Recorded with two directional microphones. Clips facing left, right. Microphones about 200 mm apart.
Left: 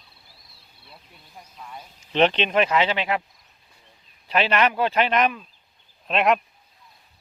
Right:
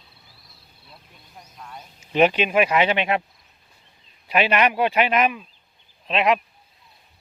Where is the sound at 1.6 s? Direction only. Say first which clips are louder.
Even; 5° left (ahead or behind).